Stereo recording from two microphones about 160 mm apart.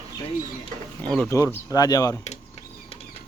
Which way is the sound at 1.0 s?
10° left (ahead or behind).